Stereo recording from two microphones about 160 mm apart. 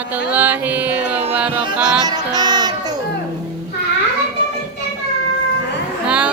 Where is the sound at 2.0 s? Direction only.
25° right (ahead or behind).